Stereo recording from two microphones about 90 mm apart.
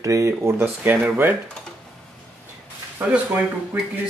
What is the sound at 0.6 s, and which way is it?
Speech, 25° right (ahead or behind).